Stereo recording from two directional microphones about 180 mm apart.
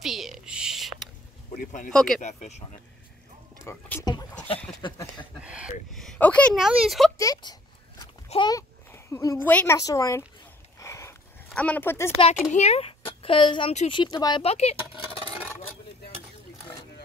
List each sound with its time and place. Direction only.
0.0 s a sound: centre (ahead or behind)
1.5 s speech: 50° left (ahead or behind)
1.9 s speech: centre (ahead or behind)
3.6 s speech: 20° left (ahead or behind)
5.4 s a sound: 5° right (ahead or behind)
7.2 s speech: 20° left (ahead or behind)
8.3 s a sound: 25° left (ahead or behind)
9.5 s speech: 10° left (ahead or behind)
9.8 s speech: 20° left (ahead or behind)
10.8 s a sound: 15° left (ahead or behind)
11.4 s speech: 5° left (ahead or behind)
12.5 s speech: 35° left (ahead or behind)
14.4 s speech: 35° left (ahead or behind)